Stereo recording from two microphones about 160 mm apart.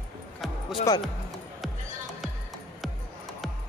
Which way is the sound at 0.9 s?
20° left (ahead or behind).